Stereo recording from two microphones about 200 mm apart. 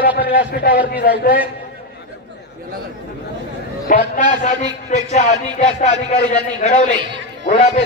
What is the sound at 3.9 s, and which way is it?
A man's voice, 40° left (ahead or behind).